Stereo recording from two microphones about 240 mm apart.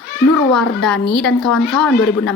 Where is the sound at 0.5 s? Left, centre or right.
Centre.